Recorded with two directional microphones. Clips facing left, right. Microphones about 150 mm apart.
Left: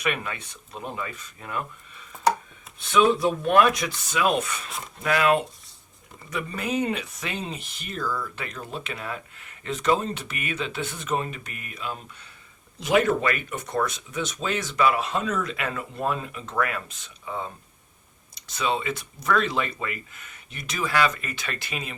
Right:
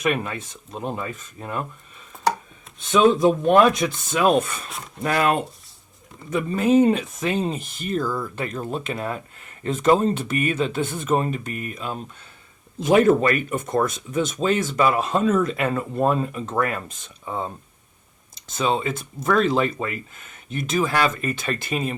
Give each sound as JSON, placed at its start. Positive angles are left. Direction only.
{"t": 0.0, "sound": "speech", "side_deg": -35}
{"t": 2.9, "sound": "speech", "side_deg": -20}
{"t": 3.9, "sound": "speech", "side_deg": -45}
{"t": 6.7, "sound": "speech", "side_deg": -35}
{"t": 18.6, "sound": "speech", "side_deg": -40}
{"t": 20.5, "sound": "speech", "side_deg": -45}